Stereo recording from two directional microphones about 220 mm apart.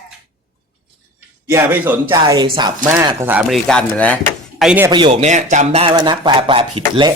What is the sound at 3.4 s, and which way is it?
Speech, centre (ahead or behind).